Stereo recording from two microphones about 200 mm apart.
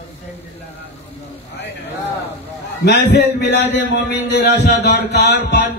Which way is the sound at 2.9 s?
55° left (ahead or behind).